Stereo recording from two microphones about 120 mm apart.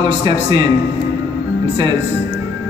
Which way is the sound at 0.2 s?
40° right (ahead or behind).